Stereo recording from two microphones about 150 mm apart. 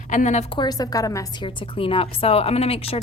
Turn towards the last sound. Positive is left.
turn(degrees=40)  # may be behind; listen again after turning